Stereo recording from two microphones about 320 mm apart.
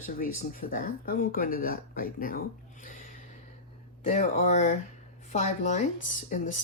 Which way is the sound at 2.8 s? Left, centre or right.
Left.